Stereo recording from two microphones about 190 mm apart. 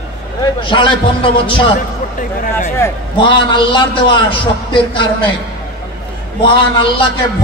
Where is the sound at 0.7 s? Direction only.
25° left (ahead or behind).